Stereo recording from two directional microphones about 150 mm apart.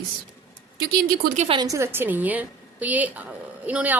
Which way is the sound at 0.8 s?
85° right.